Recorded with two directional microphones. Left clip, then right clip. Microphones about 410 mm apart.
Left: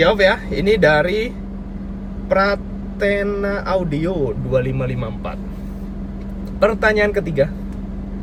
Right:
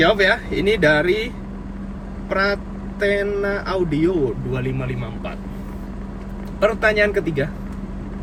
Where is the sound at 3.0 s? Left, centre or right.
Centre.